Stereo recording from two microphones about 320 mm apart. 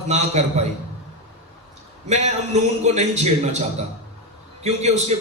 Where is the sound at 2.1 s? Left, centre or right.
Right.